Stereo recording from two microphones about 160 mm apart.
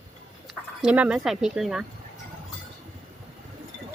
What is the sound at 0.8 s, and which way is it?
Speech, 10° right (ahead or behind).